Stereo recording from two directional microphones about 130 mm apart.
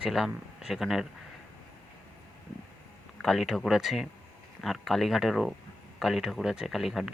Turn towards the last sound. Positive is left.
turn(degrees=0)  # may be behind; listen again after turning